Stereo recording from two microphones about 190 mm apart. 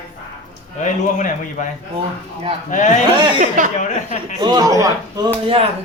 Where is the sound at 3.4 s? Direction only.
45° right (ahead or behind).